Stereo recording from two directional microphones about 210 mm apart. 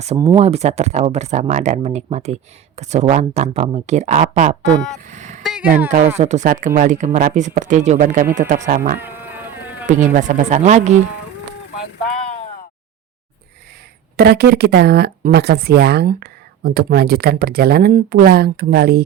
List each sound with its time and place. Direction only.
0.3 s speech: 30° right (ahead or behind)
5.0 s vehicle: 35° right (ahead or behind)
5.4 s a sound: centre (ahead or behind)
5.9 s speech: 35° right (ahead or behind)
9.0 s a sound: 10° right (ahead or behind)
9.8 s speech: 35° right (ahead or behind)
14.2 s speech: 50° right (ahead or behind)